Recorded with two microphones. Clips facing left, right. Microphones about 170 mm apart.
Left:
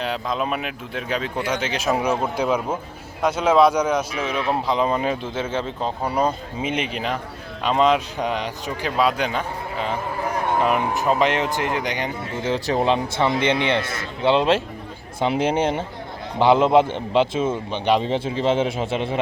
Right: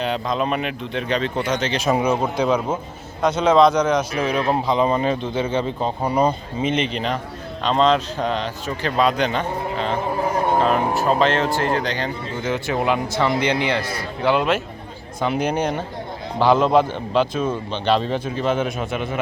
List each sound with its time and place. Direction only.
0.0 s a man's voice: centre (ahead or behind)
12.4 s a man's voice: 35° left (ahead or behind)